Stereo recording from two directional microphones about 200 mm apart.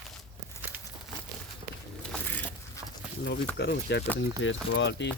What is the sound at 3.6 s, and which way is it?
Speech, 55° left (ahead or behind).